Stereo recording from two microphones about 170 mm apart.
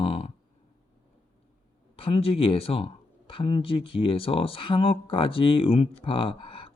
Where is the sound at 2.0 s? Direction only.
35° left (ahead or behind).